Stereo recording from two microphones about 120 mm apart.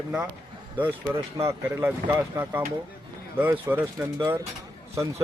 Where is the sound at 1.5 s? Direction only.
20° right (ahead or behind).